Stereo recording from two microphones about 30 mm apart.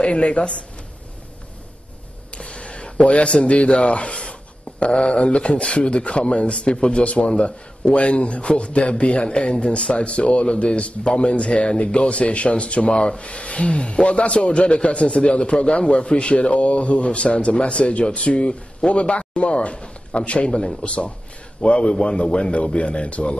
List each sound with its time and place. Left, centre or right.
0.0 s speech: left
2.4 s a sound: left
3.8 s a man's voice: left
21.8 s a man's voice: left
22.2 s speech: left